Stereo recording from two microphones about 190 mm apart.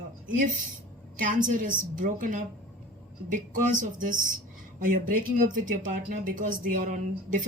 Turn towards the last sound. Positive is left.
turn(degrees=-40)  # may be behind; listen again after turning